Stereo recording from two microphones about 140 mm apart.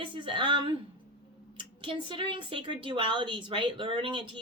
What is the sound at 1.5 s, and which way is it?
A woman's voice, 35° right (ahead or behind).